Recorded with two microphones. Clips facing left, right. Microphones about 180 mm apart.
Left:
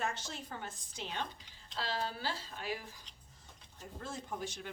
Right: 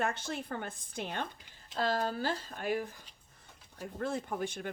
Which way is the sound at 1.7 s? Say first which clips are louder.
Right 7 dB; 50° right (ahead or behind).